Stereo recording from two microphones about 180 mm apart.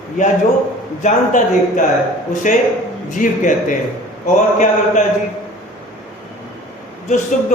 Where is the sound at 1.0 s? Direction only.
45° left (ahead or behind).